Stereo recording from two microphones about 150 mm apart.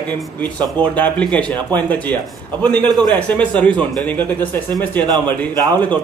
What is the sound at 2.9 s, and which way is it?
Speech, 25° right (ahead or behind).